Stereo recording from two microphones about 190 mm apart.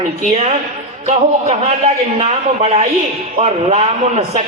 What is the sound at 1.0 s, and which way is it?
Speech, 35° right (ahead or behind).